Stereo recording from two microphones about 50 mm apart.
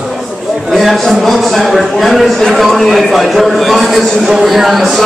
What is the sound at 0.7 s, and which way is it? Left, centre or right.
Speech, centre.